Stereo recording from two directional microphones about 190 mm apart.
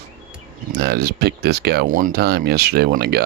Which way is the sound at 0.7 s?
60° right (ahead or behind).